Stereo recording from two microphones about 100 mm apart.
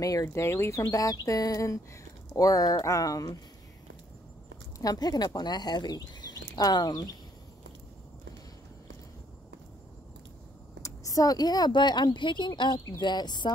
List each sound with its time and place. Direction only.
0.0 s speech: 35° left (ahead or behind)
0.3 s speech: 25° left (ahead or behind)
4.7 s speech: 40° left (ahead or behind)
10.8 s a woman's voice: 35° left (ahead or behind)